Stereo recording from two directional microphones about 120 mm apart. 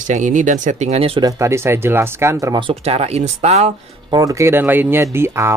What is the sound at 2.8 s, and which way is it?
Speech, 60° right (ahead or behind).